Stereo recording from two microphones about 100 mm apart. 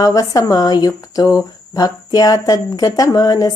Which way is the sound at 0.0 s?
40° left (ahead or behind).